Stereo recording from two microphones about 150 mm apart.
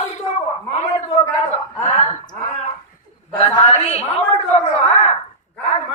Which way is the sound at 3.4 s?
40° left (ahead or behind).